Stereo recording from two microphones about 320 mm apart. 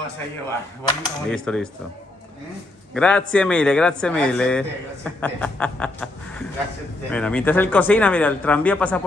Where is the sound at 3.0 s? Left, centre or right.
Centre.